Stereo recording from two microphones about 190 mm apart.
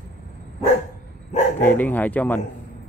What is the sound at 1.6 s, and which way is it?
Speech, 10° left (ahead or behind).